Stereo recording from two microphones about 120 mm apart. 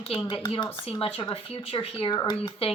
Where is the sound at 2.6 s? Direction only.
55° left (ahead or behind).